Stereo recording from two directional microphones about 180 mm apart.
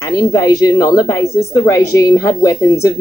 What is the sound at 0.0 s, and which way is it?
A woman's voice, 20° left (ahead or behind).